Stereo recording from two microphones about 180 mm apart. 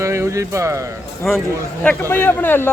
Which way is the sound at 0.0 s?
15° right (ahead or behind).